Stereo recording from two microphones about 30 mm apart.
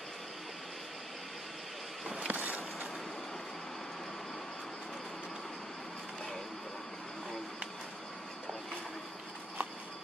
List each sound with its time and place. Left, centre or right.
2.1 s boat: right